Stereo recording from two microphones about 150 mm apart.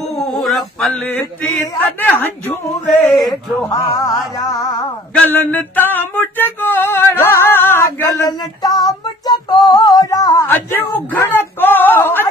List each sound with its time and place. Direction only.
0.2 s male singing: centre (ahead or behind)
1.6 s speech: 15° left (ahead or behind)
3.0 s speech: centre (ahead or behind)
3.6 s music: 20° left (ahead or behind)
5.1 s a sound: 10° left (ahead or behind)
10.5 s a sound: 10° left (ahead or behind)